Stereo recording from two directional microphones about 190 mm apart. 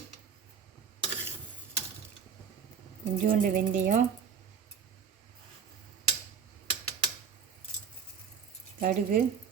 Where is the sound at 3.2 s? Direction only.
50° right (ahead or behind).